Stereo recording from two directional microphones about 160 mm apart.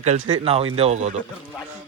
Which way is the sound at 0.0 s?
45° right (ahead or behind).